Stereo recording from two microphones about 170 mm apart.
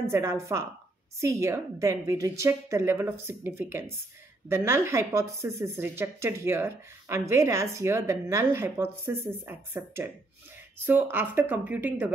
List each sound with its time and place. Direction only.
0.0 s speech: 15° right (ahead or behind)